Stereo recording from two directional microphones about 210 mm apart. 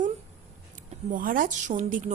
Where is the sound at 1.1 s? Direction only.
40° right (ahead or behind).